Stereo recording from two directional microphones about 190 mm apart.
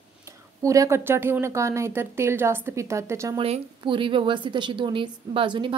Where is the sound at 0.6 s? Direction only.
15° right (ahead or behind).